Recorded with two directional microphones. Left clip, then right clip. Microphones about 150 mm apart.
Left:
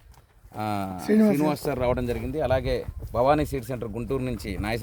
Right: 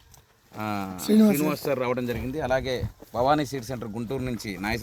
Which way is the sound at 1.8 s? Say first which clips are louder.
Left 2 dB; 90° left.